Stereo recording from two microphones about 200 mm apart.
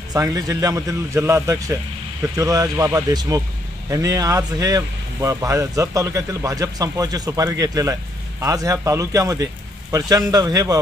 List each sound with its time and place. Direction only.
0.1 s speech: 20° right (ahead or behind)